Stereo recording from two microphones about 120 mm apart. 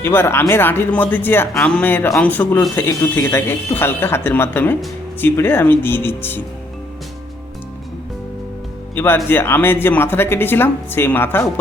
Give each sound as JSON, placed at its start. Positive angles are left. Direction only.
{"t": 0.0, "sound": "speech", "side_deg": 20}
{"t": 9.0, "sound": "speech", "side_deg": 15}